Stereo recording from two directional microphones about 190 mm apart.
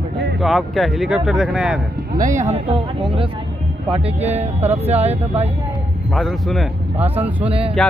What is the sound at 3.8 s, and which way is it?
Speech, 30° right (ahead or behind).